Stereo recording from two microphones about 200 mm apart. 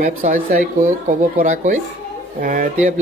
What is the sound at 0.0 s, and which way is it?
Speech, 40° right (ahead or behind).